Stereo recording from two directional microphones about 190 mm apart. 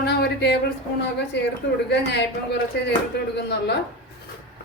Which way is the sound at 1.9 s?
65° left (ahead or behind).